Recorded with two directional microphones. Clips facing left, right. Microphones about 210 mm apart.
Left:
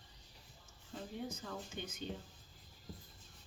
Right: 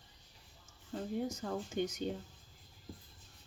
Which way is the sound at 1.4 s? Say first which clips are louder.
Right 9 dB; 50° right (ahead or behind).